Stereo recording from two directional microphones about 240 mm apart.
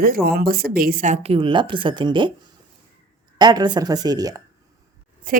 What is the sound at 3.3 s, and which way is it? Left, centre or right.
Speech, centre.